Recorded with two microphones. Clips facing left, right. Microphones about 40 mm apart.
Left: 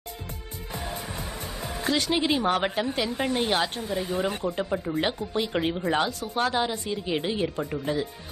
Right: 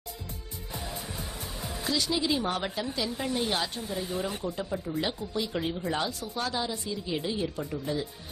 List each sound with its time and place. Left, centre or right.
1.9 s a woman's voice: left